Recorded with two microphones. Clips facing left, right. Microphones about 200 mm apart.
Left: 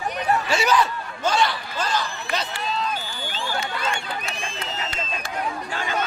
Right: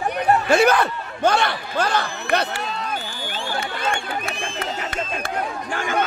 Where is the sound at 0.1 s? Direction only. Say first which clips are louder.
Right 6 dB; 55° right (ahead or behind).